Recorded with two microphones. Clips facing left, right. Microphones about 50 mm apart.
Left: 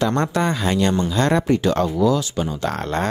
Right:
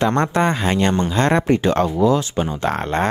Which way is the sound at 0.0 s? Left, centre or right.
Right.